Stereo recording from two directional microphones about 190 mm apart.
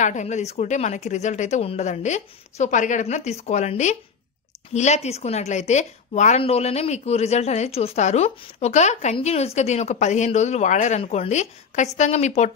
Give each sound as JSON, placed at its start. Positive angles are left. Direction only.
{"t": 0.0, "sound": "speech", "side_deg": 40}